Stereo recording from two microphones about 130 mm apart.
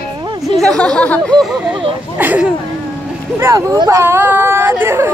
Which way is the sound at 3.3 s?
25° right (ahead or behind).